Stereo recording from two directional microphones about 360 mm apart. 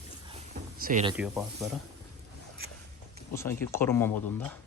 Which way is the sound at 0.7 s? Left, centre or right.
Right.